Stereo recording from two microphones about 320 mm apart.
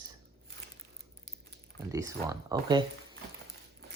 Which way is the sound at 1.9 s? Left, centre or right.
Centre.